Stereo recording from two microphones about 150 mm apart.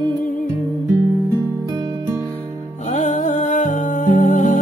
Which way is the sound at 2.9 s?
55° left (ahead or behind).